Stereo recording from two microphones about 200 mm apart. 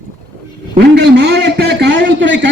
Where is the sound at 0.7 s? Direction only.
55° right (ahead or behind).